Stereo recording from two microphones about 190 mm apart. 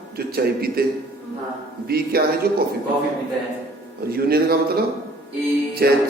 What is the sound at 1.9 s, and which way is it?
Speech, 55° right (ahead or behind).